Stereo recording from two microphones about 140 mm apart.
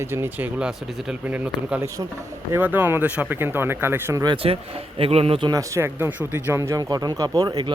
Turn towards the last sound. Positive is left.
turn(degrees=-30)  # may be behind; listen again after turning